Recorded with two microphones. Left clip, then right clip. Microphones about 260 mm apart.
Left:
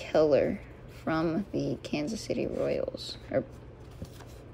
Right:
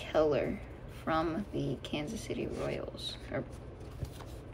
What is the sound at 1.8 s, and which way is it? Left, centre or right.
Speech, left.